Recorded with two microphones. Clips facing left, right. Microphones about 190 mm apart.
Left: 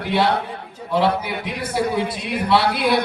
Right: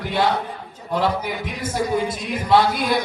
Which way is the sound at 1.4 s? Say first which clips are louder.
Left 2 dB; 45° right (ahead or behind).